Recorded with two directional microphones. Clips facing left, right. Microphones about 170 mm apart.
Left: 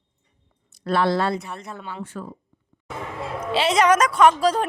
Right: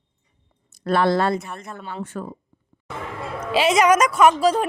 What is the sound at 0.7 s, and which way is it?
A woman's voice, 50° right (ahead or behind).